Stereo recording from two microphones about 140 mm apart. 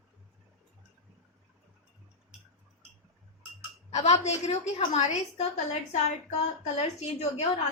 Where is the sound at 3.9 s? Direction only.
50° left (ahead or behind).